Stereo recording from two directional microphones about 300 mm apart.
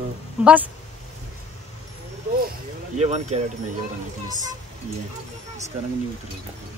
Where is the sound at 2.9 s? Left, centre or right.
Right.